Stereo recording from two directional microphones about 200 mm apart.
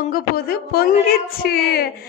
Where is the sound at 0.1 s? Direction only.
50° left (ahead or behind).